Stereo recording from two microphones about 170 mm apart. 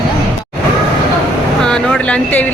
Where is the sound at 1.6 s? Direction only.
5° left (ahead or behind).